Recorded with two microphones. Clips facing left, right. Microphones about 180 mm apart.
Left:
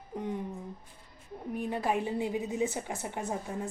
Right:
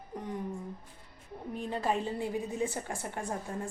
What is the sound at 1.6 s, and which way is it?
Speech, 10° left (ahead or behind).